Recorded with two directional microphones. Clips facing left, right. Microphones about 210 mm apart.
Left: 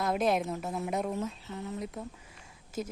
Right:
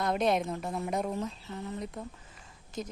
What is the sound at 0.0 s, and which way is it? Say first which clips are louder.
A woman's voice: even; centre (ahead or behind).